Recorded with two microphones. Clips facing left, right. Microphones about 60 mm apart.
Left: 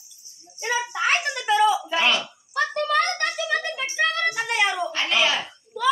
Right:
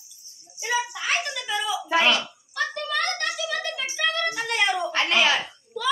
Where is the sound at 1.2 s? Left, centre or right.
Left.